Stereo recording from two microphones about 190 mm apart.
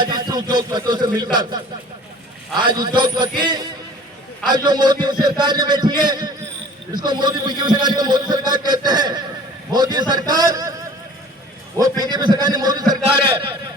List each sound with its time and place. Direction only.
0.0 s speech: 25° right (ahead or behind)